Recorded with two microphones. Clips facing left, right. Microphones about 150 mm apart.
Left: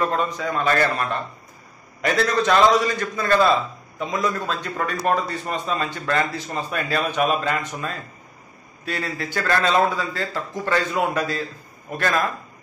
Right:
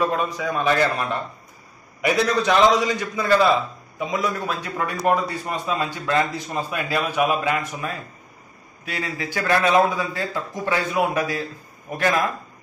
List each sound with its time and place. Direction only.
0.0 s a man's voice: 15° right (ahead or behind)